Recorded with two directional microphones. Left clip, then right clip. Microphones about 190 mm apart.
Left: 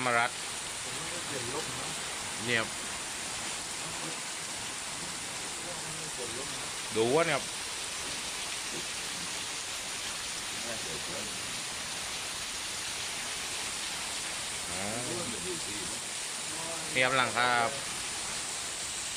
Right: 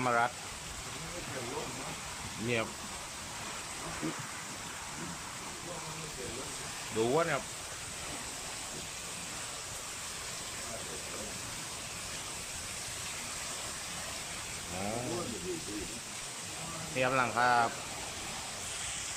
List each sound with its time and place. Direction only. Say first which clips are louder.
0.0 s speech: left 1 dB; 5° right (ahead or behind)
7.0 s speech: left 3 dB; centre (ahead or behind)
17.0 s speech: left 2 dB; 5° right (ahead or behind)